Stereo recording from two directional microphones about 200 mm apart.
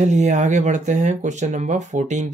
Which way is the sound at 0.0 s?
35° right (ahead or behind).